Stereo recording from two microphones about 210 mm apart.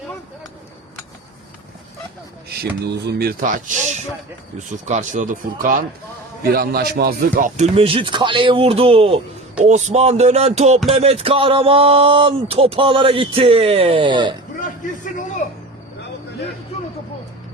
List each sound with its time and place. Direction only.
2.9 s speech: 50° right (ahead or behind)
4.9 s speech: 35° right (ahead or behind)
14.6 s a sound: 40° left (ahead or behind)